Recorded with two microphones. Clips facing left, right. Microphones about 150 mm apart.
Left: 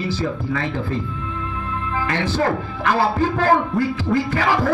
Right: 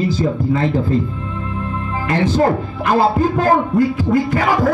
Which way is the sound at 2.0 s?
25° right (ahead or behind).